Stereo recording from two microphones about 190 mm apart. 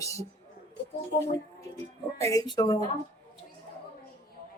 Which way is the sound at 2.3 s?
20° left (ahead or behind).